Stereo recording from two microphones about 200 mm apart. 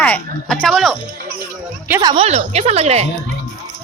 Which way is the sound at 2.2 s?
35° right (ahead or behind).